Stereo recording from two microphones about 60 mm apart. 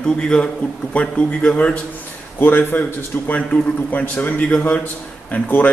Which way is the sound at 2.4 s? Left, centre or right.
Left.